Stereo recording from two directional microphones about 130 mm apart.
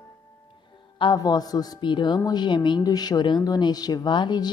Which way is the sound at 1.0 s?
30° left (ahead or behind).